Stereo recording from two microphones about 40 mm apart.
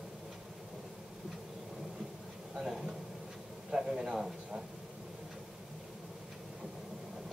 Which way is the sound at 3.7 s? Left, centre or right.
Centre.